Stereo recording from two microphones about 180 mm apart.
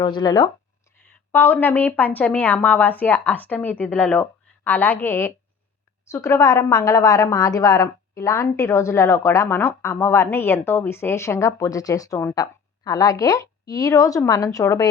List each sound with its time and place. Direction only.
0.0 s speech: 25° left (ahead or behind)
1.3 s a woman's voice: 10° left (ahead or behind)